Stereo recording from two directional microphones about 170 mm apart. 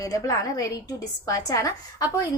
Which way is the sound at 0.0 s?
20° left (ahead or behind).